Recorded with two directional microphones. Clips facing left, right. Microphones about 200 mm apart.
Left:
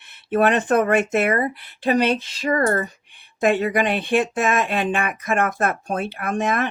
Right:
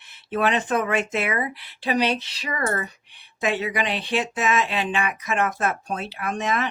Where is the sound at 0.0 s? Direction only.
60° left (ahead or behind).